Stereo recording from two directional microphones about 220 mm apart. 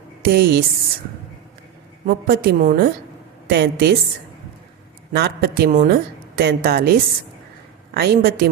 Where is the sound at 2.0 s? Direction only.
45° right (ahead or behind).